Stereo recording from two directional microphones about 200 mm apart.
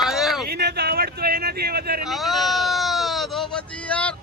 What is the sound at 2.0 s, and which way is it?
Sheep, centre (ahead or behind).